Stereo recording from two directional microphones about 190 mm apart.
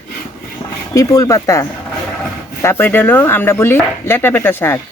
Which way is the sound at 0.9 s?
15° left (ahead or behind).